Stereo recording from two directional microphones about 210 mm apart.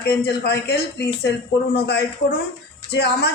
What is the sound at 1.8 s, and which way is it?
A woman's voice, 55° left (ahead or behind).